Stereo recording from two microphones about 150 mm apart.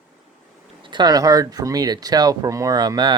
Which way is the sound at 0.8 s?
30° right (ahead or behind).